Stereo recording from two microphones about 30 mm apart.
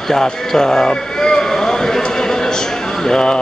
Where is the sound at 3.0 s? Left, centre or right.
Left.